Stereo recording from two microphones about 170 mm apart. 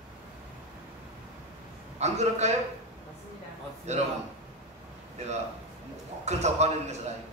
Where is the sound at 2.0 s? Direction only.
40° right (ahead or behind).